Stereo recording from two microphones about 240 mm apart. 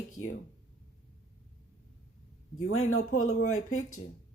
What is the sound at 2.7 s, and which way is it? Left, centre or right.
Speech, left.